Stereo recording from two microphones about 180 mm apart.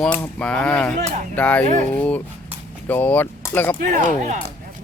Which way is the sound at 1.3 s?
5° left (ahead or behind).